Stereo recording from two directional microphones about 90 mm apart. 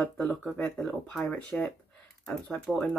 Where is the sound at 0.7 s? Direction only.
5° left (ahead or behind).